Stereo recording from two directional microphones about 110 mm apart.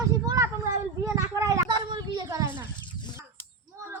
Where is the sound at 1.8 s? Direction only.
45° right (ahead or behind).